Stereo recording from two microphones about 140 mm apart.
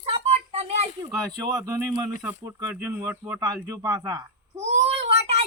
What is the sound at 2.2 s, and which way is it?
Speech, 15° right (ahead or behind).